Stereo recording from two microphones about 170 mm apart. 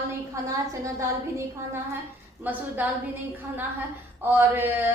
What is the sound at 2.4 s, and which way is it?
Speech, 10° right (ahead or behind).